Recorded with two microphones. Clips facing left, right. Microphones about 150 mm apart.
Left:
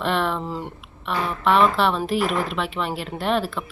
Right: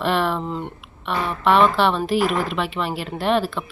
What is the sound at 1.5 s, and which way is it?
Speech, centre (ahead or behind).